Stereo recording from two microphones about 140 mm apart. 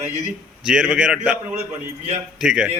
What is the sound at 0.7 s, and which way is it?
Speech, 5° right (ahead or behind).